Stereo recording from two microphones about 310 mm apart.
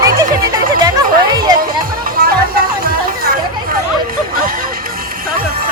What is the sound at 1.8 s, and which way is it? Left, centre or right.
Music, right.